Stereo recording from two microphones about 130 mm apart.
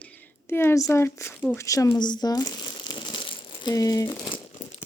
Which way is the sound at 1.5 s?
25° left (ahead or behind).